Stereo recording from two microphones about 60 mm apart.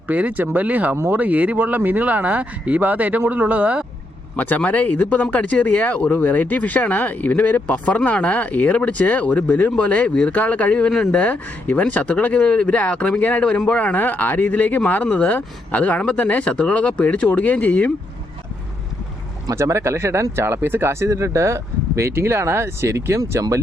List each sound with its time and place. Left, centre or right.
0.1 s speech: right
4.4 s speech: left
19.5 s speech: right